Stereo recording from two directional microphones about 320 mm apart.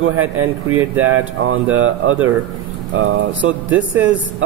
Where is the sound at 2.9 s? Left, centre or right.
Right.